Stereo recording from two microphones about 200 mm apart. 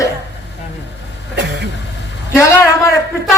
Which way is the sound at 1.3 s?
60° right (ahead or behind).